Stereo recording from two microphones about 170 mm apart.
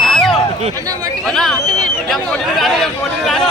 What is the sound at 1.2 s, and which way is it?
Speech, centre (ahead or behind).